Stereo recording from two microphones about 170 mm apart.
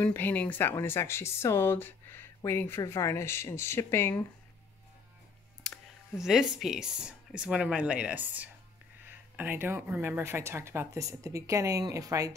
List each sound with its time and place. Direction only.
0.0 s speech: 10° left (ahead or behind)
5.6 s a sound: centre (ahead or behind)
6.5 s speech: 5° right (ahead or behind); by 12.4 s 20° right (ahead or behind)